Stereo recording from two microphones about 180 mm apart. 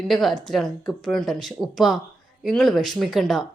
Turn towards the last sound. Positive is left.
turn(degrees=0)  # may be behind; listen again after turning